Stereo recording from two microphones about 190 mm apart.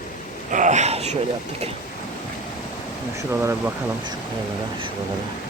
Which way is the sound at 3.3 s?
10° right (ahead or behind).